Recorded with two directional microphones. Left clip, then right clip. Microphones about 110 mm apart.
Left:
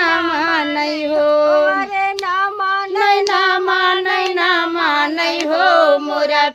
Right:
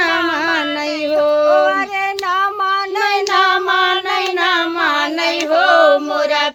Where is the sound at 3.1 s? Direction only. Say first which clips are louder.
Right 1 dB; 40° left (ahead or behind).